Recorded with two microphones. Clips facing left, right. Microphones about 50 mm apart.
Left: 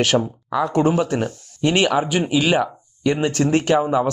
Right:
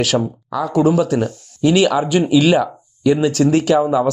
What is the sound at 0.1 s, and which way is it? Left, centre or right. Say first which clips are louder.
Speech: right 1 dB; centre.